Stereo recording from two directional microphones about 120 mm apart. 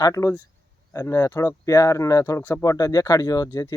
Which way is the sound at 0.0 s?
25° left (ahead or behind).